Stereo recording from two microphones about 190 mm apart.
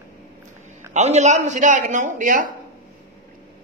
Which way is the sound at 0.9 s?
35° right (ahead or behind).